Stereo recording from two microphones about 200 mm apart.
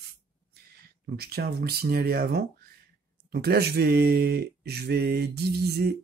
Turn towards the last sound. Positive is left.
turn(degrees=-55)  # may be behind; listen again after turning